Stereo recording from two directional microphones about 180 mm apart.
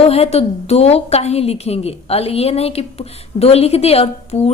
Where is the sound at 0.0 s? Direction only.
35° left (ahead or behind).